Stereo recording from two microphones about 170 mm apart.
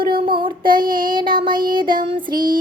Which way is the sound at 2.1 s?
30° right (ahead or behind).